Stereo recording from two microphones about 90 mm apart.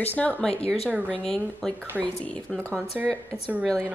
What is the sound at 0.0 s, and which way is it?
Speech, 20° left (ahead or behind).